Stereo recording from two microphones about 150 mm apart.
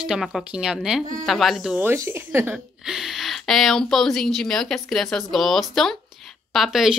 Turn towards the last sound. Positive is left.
turn(degrees=-5)  # may be behind; listen again after turning